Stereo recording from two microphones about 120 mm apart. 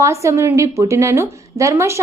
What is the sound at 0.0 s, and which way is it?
A woman's voice, 25° right (ahead or behind).